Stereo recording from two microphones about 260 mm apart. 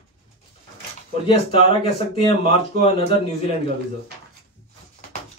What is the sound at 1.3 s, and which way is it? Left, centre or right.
Speech, left.